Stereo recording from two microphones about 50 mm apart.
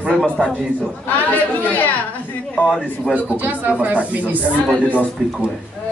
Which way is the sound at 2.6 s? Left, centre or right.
Left.